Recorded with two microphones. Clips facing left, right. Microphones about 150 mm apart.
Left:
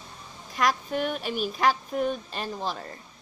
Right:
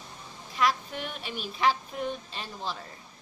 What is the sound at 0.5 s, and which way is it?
Speech, 45° left (ahead or behind).